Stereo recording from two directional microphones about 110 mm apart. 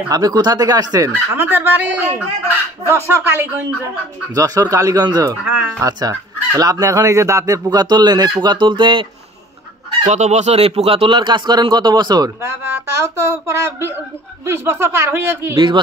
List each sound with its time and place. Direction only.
0.1 s speech: 35° right (ahead or behind)
1.3 s speech: 20° right (ahead or behind)
4.4 s speech: 30° right (ahead or behind)
5.4 s speech: 10° right (ahead or behind)
5.8 s speech: 35° right (ahead or behind)
10.0 s speech: 90° right; by 12.3 s 40° right (ahead or behind)
12.4 s speech: 20° right (ahead or behind)